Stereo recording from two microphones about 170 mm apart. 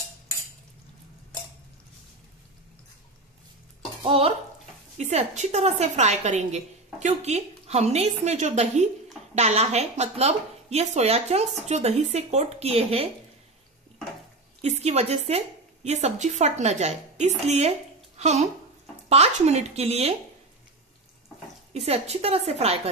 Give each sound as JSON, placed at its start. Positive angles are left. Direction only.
{"t": 4.0, "sound": "a woman's voice", "side_deg": -35}
{"t": 14.6, "sound": "a woman's voice", "side_deg": -40}
{"t": 21.7, "sound": "a woman's voice", "side_deg": -40}